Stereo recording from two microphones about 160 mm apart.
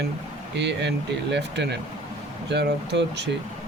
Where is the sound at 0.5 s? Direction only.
90° right.